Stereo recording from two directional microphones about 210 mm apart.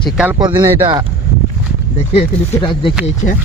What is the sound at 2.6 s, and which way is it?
Speech, 25° left (ahead or behind).